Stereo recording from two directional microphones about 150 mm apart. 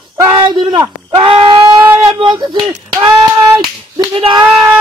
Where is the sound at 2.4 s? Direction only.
25° right (ahead or behind).